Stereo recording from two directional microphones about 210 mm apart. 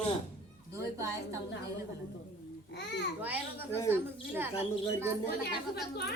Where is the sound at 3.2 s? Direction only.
10° right (ahead or behind).